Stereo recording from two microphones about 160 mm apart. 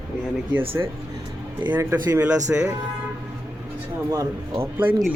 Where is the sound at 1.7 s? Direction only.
10° right (ahead or behind).